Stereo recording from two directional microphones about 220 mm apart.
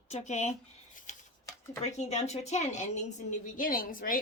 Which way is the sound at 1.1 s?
30° left (ahead or behind).